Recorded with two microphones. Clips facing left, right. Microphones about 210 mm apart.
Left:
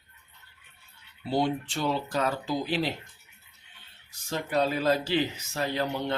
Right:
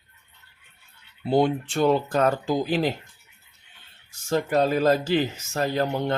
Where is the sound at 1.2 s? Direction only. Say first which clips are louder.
Right 6 dB; 55° right (ahead or behind).